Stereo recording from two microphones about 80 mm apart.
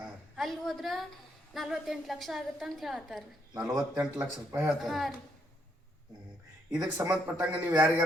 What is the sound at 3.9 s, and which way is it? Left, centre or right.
Speech, centre.